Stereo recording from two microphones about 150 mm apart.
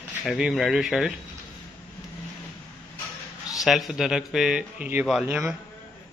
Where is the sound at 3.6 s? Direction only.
Centre (ahead or behind).